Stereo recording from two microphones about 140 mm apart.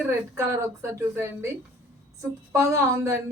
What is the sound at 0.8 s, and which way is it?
A woman's voice, 20° right (ahead or behind).